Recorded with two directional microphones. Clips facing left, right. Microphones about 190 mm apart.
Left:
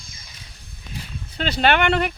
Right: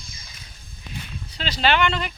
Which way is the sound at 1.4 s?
55° left (ahead or behind).